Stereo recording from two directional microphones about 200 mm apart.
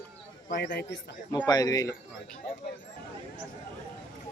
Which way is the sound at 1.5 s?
20° left (ahead or behind).